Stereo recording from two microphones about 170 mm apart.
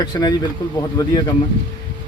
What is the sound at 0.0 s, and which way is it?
Speech, 25° left (ahead or behind).